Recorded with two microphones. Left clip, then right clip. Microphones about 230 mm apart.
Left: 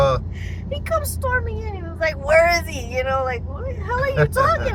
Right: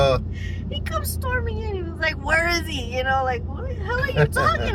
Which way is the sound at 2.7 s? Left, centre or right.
Centre.